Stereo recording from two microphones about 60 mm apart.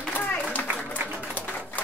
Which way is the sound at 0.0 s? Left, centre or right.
Left.